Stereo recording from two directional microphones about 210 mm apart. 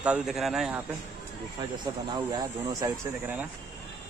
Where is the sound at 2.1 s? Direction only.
20° right (ahead or behind).